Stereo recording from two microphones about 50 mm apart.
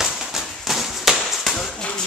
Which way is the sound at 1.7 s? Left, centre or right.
Centre.